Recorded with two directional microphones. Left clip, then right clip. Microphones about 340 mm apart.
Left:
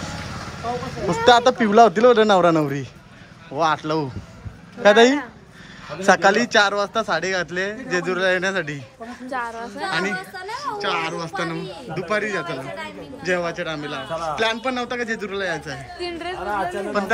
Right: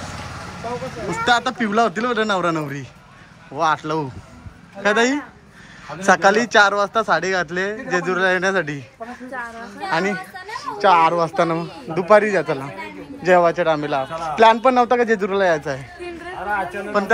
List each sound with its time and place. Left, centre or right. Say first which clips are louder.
1.1 s speech: left 4 dB; centre
9.3 s a woman's voice: left 6 dB; left
9.8 s a man's voice: right 3 dB; centre